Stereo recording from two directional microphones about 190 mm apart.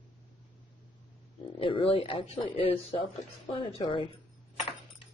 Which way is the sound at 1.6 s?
30° left (ahead or behind).